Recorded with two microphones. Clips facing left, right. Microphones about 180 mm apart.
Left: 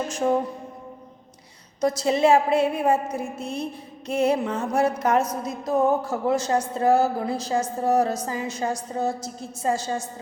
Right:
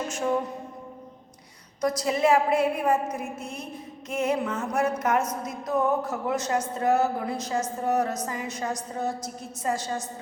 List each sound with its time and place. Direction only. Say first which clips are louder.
0.1 s music: left 4 dB; 35° left (ahead or behind)
1.8 s speech: left 3 dB; 25° left (ahead or behind)
4.1 s music: left 4 dB; 35° left (ahead or behind)
5.5 s speech: left 4 dB; 30° left (ahead or behind)